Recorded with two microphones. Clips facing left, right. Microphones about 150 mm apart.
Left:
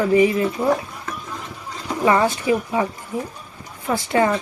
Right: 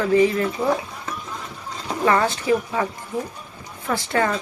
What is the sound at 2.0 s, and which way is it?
Speech, 15° left (ahead or behind).